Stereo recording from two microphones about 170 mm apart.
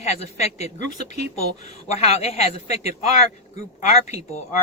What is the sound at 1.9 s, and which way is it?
Speech, 40° left (ahead or behind).